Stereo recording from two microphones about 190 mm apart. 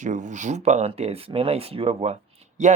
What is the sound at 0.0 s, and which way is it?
Speech, 40° right (ahead or behind).